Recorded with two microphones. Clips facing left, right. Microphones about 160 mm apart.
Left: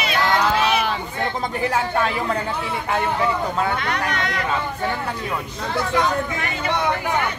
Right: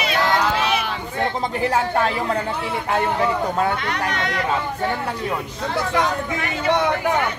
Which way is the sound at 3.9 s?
25° right (ahead or behind).